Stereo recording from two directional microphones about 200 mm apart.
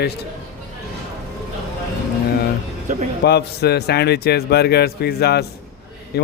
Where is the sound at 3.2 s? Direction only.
55° left (ahead or behind).